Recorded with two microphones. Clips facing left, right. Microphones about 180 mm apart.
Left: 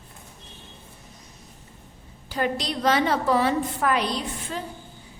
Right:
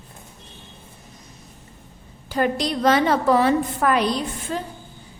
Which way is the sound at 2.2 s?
50° right (ahead or behind).